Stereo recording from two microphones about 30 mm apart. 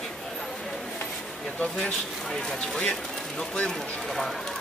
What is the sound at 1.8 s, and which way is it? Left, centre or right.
Speech, left.